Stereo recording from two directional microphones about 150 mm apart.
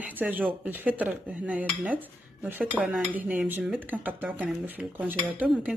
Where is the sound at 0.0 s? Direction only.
10° right (ahead or behind).